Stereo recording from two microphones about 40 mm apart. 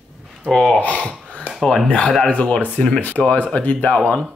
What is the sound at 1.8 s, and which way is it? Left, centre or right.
Speech, left.